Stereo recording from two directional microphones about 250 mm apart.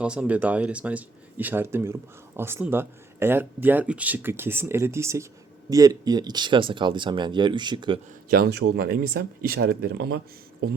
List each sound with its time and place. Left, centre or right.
0.0 s speech: centre
8.3 s speech: right